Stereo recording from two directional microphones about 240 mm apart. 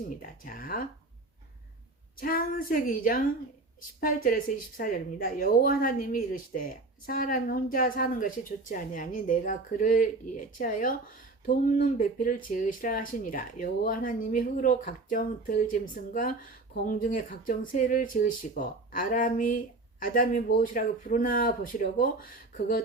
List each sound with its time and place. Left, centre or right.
0.2 s speech: left
2.1 s speech: left